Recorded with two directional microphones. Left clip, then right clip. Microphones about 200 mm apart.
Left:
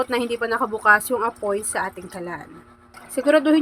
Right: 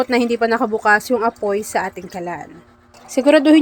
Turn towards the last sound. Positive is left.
turn(degrees=-25)  # may be behind; listen again after turning